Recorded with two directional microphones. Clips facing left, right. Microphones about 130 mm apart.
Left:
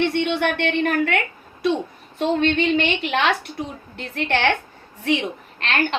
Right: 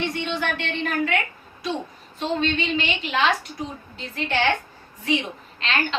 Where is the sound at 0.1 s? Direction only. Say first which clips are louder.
Left 6 dB; 65° left (ahead or behind).